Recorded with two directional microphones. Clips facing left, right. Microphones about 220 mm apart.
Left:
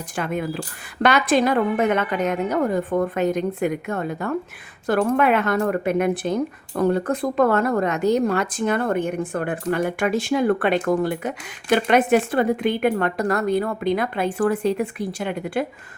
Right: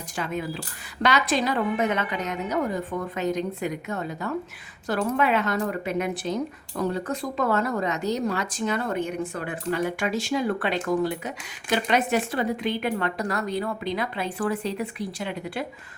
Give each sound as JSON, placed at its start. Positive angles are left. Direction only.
{"t": 0.2, "sound": "speech", "side_deg": 55}